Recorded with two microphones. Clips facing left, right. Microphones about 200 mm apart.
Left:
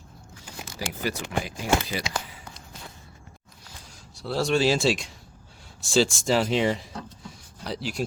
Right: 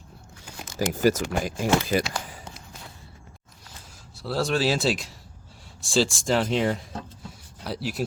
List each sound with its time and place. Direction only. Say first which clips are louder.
0.8 s speech: right 9 dB; 45° right (ahead or behind)
4.1 s speech: left 1 dB; centre (ahead or behind)